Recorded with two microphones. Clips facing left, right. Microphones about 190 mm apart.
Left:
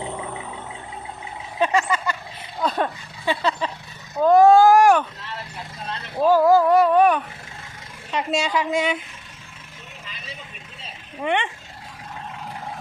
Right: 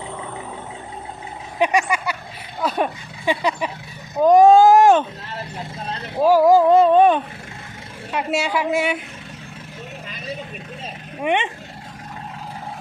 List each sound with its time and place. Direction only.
1.5 s a woman's voice: 15° right (ahead or behind)
6.2 s a sound: 15° right (ahead or behind)
8.1 s a woman's voice: 10° right (ahead or behind)
11.2 s a woman's voice: 15° right (ahead or behind)